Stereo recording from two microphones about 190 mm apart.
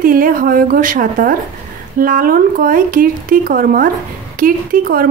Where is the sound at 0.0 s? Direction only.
50° right (ahead or behind).